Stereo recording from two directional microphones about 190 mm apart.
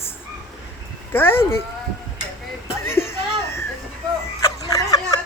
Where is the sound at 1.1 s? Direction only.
10° left (ahead or behind).